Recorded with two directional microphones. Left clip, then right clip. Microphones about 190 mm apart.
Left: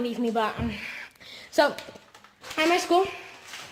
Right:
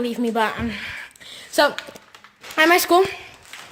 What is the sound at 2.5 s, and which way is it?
Speech, 25° right (ahead or behind).